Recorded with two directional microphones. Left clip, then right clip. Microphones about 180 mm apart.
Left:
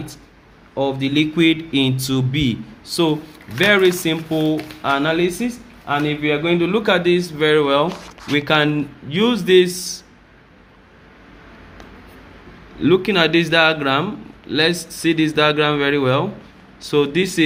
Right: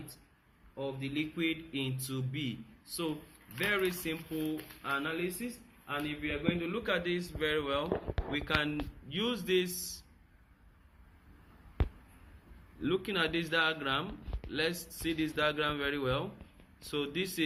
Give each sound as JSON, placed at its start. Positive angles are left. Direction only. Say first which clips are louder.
{"t": 0.8, "sound": "speech", "louder": "left 18 dB", "side_deg": 65}
{"t": 12.8, "sound": "speech", "louder": "left 17 dB", "side_deg": 30}